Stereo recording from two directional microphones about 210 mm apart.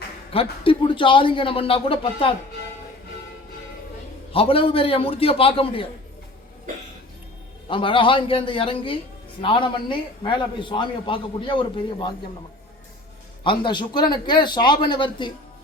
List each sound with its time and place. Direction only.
0.3 s a man's voice: 25° left (ahead or behind)
4.3 s a man's voice: 25° left (ahead or behind)
7.7 s a man's voice: 25° left (ahead or behind)
13.4 s a man's voice: 25° left (ahead or behind)